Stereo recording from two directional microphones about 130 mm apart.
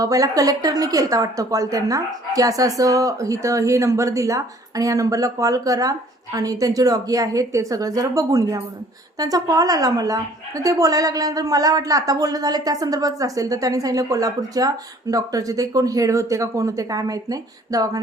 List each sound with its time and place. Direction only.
0.0 s a woman's voice: 25° right (ahead or behind)